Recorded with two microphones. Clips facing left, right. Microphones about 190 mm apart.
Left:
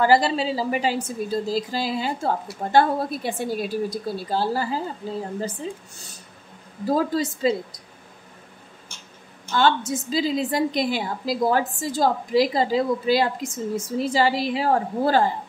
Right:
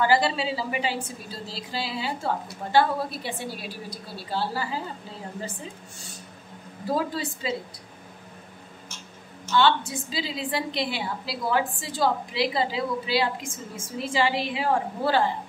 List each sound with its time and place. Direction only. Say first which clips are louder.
0.0 s a woman's voice: left 4 dB; 40° left (ahead or behind)
7.0 s a woman's voice: left 6 dB; 45° left (ahead or behind)
9.5 s a woman's voice: left 1 dB; 45° left (ahead or behind)